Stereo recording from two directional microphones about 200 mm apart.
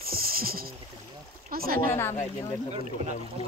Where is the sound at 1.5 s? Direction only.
50° right (ahead or behind).